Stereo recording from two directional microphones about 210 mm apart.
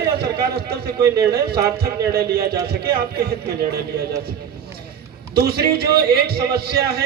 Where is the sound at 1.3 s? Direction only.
50° right (ahead or behind).